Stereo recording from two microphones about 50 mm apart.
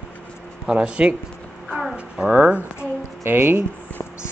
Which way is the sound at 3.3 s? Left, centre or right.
Right.